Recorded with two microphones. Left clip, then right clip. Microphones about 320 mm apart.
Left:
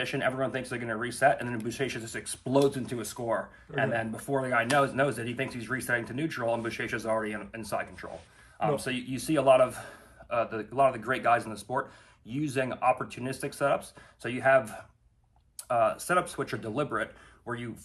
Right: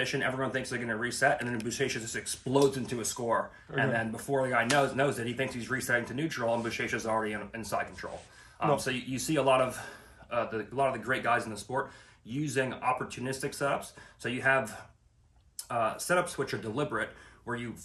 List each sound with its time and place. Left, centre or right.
0.2 s speech: centre
15.7 s speech: centre